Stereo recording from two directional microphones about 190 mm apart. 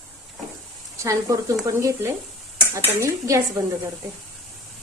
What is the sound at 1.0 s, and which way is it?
A woman's voice, 15° right (ahead or behind).